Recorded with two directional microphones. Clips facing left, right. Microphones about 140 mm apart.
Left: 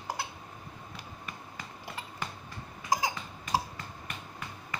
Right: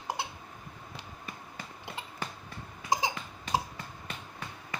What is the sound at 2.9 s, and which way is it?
Cough, 25° right (ahead or behind).